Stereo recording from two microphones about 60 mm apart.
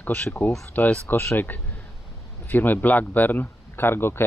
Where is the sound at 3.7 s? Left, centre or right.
Left.